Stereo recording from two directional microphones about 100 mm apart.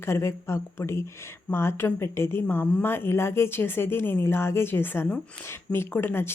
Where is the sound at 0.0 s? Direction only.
25° left (ahead or behind).